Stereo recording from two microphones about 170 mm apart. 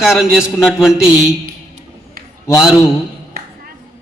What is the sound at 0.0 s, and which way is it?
Speech, 5° right (ahead or behind).